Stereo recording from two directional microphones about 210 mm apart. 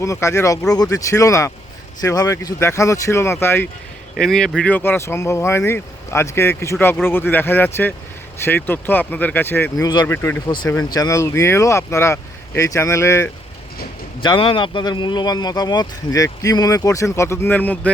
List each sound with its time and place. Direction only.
0.0 s speech: 15° left (ahead or behind)